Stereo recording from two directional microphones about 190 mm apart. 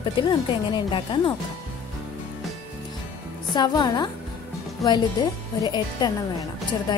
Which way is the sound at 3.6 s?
25° left (ahead or behind).